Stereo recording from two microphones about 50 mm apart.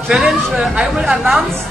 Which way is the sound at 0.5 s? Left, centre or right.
Centre.